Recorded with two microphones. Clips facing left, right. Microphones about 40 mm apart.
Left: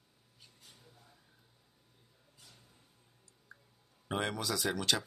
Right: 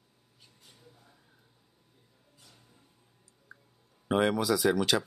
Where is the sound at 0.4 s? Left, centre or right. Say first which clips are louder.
Right 2 dB; centre.